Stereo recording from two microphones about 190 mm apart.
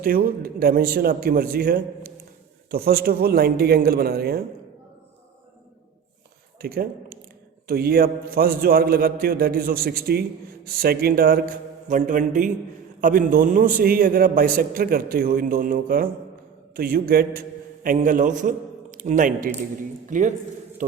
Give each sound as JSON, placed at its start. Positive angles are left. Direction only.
{"t": 0.0, "sound": "a man's voice", "side_deg": -50}
{"t": 6.6, "sound": "a man's voice", "side_deg": -55}